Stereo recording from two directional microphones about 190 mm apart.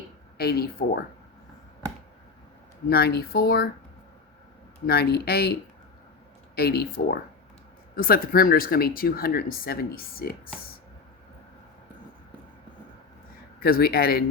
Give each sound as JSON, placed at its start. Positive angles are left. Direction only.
{"t": 0.3, "sound": "speech", "side_deg": 55}
{"t": 2.9, "sound": "speech", "side_deg": 55}
{"t": 4.9, "sound": "speech", "side_deg": 55}
{"t": 6.6, "sound": "speech", "side_deg": 55}
{"t": 13.6, "sound": "speech", "side_deg": 55}